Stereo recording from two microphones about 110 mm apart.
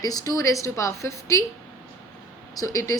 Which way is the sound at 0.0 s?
35° left (ahead or behind).